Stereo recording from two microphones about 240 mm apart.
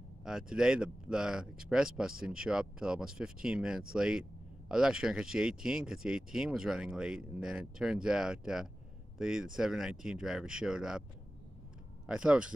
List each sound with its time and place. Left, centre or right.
0.2 s speech: centre
12.1 s speech: centre